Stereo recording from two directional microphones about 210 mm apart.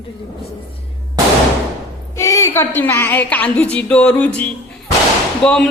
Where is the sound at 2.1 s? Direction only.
15° left (ahead or behind).